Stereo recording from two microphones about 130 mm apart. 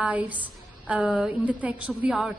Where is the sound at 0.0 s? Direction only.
10° right (ahead or behind).